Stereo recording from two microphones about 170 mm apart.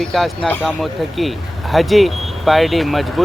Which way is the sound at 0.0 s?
Centre (ahead or behind).